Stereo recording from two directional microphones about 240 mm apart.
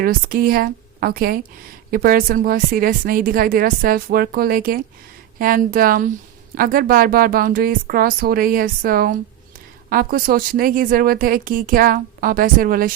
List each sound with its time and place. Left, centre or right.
0.0 s speech: right